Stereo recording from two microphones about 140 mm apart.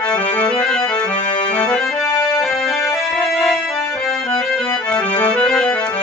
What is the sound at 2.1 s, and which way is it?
Accordion, 15° left (ahead or behind).